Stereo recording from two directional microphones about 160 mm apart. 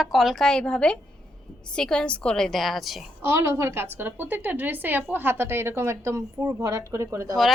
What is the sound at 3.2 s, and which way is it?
A woman's voice, 15° right (ahead or behind).